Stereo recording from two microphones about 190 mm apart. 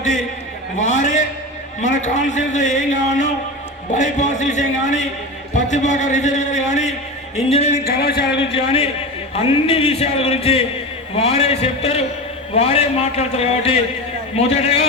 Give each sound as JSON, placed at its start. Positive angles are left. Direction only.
{"t": 0.8, "sound": "a sound", "side_deg": 40}
{"t": 1.8, "sound": "a man's voice", "side_deg": 40}
{"t": 3.9, "sound": "a man's voice", "side_deg": 40}
{"t": 7.9, "sound": "speech", "side_deg": 55}
{"t": 8.5, "sound": "a man's voice", "side_deg": 30}